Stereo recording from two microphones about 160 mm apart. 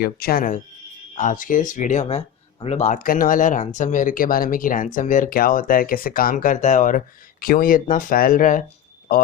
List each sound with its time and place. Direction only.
0.0 s speech: 70° left (ahead or behind); by 7.0 s 55° left (ahead or behind)
7.4 s speech: 65° left (ahead or behind)